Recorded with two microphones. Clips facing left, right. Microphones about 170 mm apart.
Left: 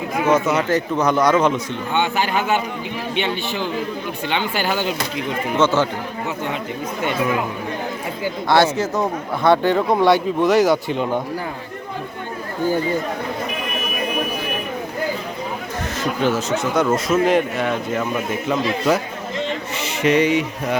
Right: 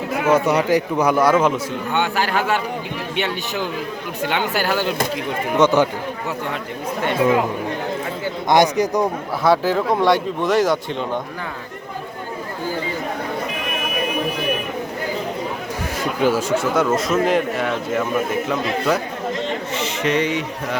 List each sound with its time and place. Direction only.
0.3 s a man's voice: 10° right (ahead or behind)
4.3 s a man's voice: 5° right (ahead or behind)
5.5 s speech: 15° right (ahead or behind)
7.0 s speech: 30° right (ahead or behind)
8.4 s speech: 15° right (ahead or behind)
9.4 s a man's voice: centre (ahead or behind)
16.2 s speech: 10° right (ahead or behind)
17.1 s a man's voice: centre (ahead or behind)
19.7 s a sound: 10° left (ahead or behind)